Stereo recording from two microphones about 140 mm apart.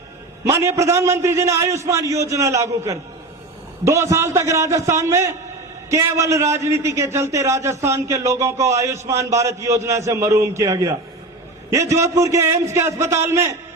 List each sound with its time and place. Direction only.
0.4 s a man's voice: 20° right (ahead or behind)